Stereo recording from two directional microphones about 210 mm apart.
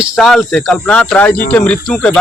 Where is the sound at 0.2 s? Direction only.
Centre (ahead or behind).